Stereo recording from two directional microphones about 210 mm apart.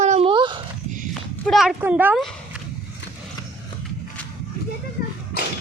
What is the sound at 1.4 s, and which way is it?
Speech, centre (ahead or behind).